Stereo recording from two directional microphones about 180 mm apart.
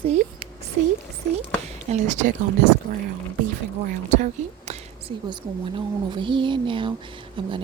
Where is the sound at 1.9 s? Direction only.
45° right (ahead or behind).